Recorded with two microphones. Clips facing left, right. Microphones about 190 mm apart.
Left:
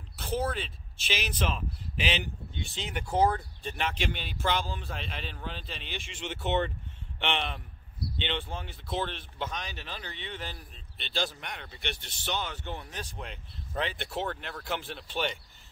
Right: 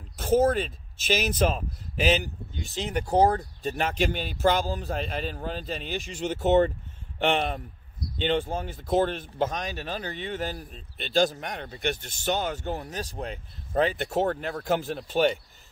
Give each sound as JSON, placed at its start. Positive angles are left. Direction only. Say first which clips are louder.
{"t": 0.2, "sound": "speech", "louder": "right 10 dB", "side_deg": -45}